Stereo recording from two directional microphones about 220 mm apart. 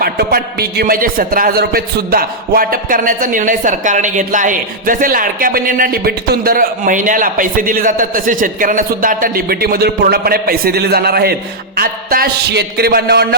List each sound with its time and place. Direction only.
0.0 s a man's voice: 45° right (ahead or behind)